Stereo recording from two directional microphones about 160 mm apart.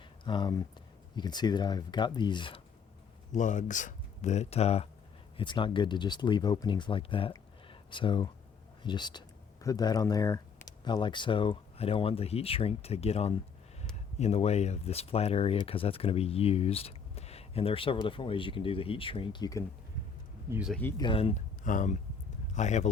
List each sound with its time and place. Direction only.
0.3 s speech: 30° left (ahead or behind)
3.3 s speech: 50° left (ahead or behind); by 19.6 s 25° left (ahead or behind)
20.5 s speech: 5° right (ahead or behind)
21.0 s speech: 35° left (ahead or behind)
21.6 s speech: 55° left (ahead or behind)